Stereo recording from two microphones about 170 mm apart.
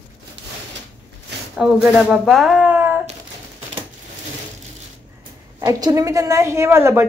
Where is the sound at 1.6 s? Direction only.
Centre (ahead or behind).